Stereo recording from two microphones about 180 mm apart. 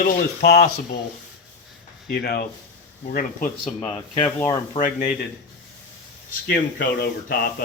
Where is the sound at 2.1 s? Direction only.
55° left (ahead or behind).